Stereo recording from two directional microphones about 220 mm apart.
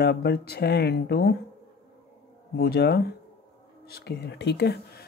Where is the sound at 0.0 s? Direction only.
45° left (ahead or behind).